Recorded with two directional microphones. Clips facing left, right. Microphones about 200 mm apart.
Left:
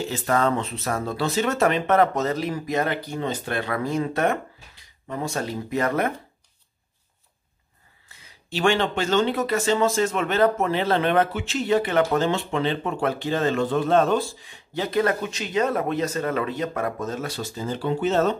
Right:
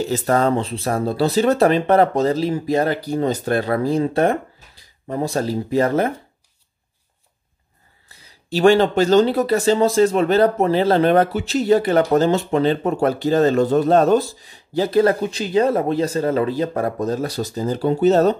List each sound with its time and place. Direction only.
0.0 s speech: 40° right (ahead or behind)
8.1 s speech: 35° right (ahead or behind)